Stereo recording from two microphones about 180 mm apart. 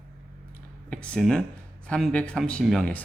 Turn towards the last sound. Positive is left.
turn(degrees=5)  # may be behind; listen again after turning